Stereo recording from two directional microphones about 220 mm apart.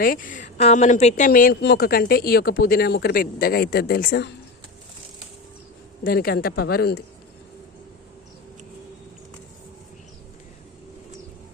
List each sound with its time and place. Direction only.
0.0 s a woman's voice: 40° left (ahead or behind)
6.1 s a woman's voice: 45° left (ahead or behind)